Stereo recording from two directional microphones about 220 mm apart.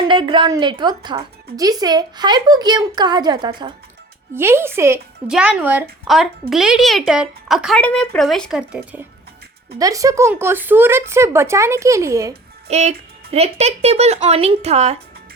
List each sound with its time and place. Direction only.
0.1 s speech: 20° right (ahead or behind); by 9.0 s 5° right (ahead or behind)
9.7 s speech: 15° right (ahead or behind)
12.6 s speech: 30° right (ahead or behind)